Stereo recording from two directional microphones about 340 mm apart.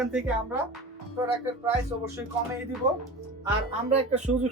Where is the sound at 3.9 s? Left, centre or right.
Centre.